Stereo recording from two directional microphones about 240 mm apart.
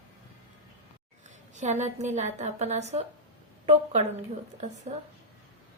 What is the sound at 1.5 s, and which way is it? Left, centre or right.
A woman's voice, right.